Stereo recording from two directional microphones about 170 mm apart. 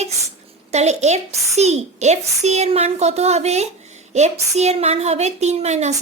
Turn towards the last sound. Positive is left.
turn(degrees=-40)  # may be behind; listen again after turning